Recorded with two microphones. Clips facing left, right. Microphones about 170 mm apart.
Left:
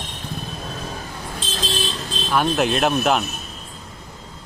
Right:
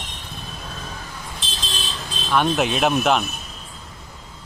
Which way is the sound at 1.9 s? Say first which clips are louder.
Left 1 dB; centre (ahead or behind).